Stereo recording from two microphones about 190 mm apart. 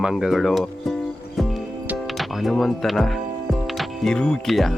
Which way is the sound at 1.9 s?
Centre (ahead or behind).